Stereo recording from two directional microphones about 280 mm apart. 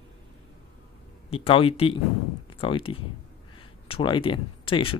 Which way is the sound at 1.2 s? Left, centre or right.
Centre.